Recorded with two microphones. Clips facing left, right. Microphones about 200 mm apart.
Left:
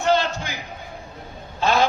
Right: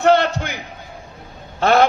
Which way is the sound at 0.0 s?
65° right (ahead or behind).